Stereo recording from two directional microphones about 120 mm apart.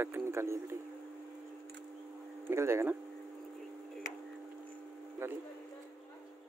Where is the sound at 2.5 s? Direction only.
20° right (ahead or behind).